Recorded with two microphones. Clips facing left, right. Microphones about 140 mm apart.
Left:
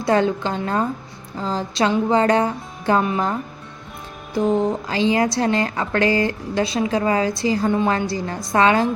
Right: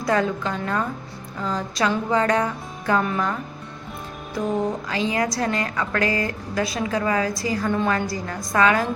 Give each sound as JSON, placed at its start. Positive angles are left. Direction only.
{"t": 0.0, "sound": "speech", "side_deg": 30}
{"t": 4.4, "sound": "speech", "side_deg": 30}